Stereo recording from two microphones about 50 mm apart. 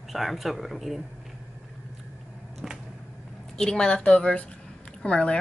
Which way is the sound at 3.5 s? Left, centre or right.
Centre.